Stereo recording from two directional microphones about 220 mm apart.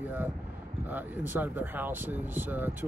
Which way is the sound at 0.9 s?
10° right (ahead or behind).